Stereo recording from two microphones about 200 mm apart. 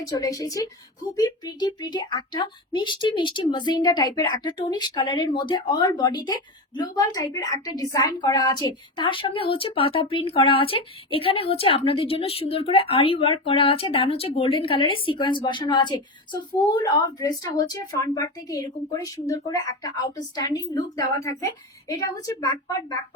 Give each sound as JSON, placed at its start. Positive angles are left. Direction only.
{"t": 0.0, "sound": "a woman's voice", "side_deg": 15}